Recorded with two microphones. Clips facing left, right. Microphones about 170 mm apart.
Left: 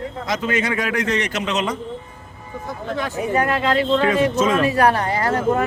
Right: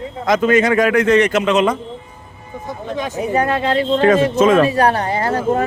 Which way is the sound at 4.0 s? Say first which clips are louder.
Right 5 dB; 45° right (ahead or behind).